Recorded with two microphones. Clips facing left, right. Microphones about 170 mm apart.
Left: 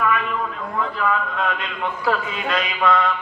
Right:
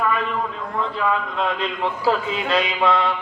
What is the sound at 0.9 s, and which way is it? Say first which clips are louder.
A man's voice: right 1 dB; 30° right (ahead or behind).